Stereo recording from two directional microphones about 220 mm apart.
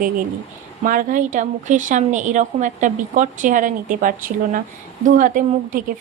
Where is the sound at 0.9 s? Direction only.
35° right (ahead or behind).